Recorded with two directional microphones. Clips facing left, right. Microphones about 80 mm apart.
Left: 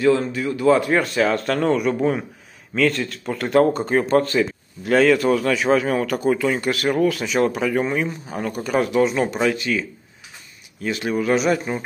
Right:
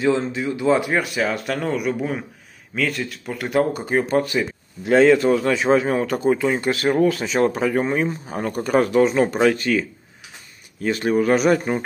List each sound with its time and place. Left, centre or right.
0.0 s speech: right
4.9 s a man's voice: right